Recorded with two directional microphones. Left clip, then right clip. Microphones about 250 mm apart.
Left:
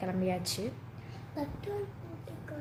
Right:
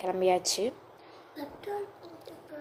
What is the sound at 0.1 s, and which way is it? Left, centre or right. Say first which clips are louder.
Speech: right 12 dB; right.